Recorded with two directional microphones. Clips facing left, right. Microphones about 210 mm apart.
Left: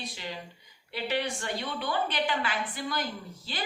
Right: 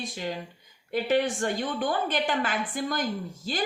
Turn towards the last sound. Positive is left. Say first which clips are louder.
# right 7 dB
turn(degrees=-45)  # may be behind; listen again after turning